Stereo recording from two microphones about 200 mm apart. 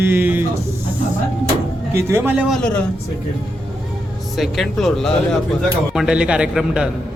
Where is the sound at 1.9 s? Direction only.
15° right (ahead or behind).